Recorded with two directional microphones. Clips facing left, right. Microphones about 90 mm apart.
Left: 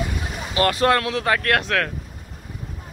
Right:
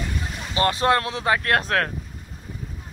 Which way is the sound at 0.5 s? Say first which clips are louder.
Left 1 dB; 25° right (ahead or behind).